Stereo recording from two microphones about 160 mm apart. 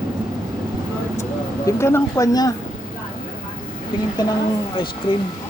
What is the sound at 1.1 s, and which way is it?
Speech, 20° left (ahead or behind).